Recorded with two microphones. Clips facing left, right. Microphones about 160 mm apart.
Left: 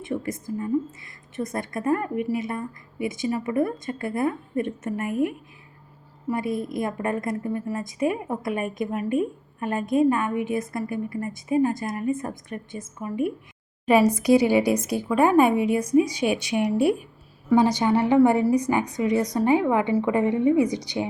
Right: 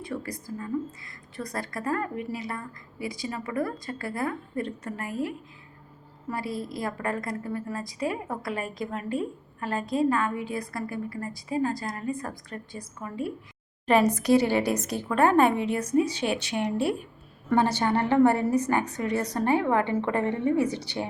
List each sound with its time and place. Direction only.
0.0 s a woman's voice: 20° left (ahead or behind)